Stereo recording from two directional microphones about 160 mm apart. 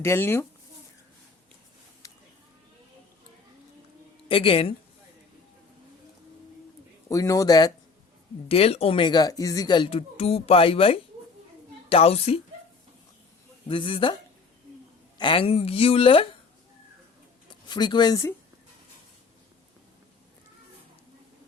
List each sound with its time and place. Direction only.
0.0 s speech: 15° left (ahead or behind)
4.3 s a woman's voice: 35° left (ahead or behind)
7.1 s speech: 20° left (ahead or behind)
8.4 s a woman's voice: 35° left (ahead or behind)
13.7 s a woman's voice: 30° left (ahead or behind)
15.2 s a woman's voice: 35° left (ahead or behind)
17.5 s speech: 25° left (ahead or behind)